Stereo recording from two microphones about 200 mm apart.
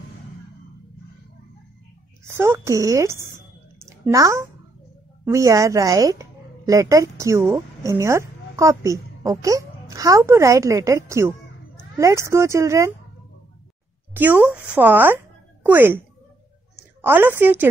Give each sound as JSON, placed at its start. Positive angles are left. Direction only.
{"t": 2.2, "sound": "a woman's voice", "side_deg": -15}
{"t": 14.1, "sound": "speech", "side_deg": -10}
{"t": 17.0, "sound": "a woman's voice", "side_deg": -10}